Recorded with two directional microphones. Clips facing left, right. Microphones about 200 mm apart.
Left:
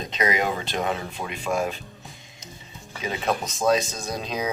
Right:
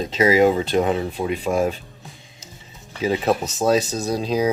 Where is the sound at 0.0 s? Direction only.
30° right (ahead or behind).